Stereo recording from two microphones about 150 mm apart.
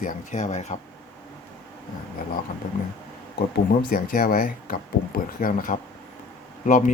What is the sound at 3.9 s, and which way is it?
Speech, 70° left (ahead or behind).